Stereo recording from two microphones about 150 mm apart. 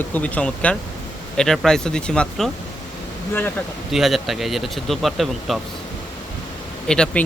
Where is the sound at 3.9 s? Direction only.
Centre (ahead or behind).